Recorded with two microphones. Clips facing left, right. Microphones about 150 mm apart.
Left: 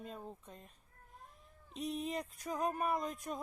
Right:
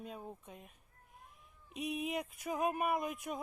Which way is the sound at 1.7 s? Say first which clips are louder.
Right 1 dB; 5° right (ahead or behind).